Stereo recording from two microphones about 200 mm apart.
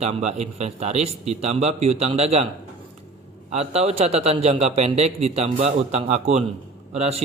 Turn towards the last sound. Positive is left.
turn(degrees=-30)  # may be behind; listen again after turning